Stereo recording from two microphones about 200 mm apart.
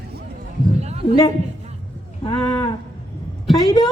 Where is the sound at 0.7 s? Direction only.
30° right (ahead or behind).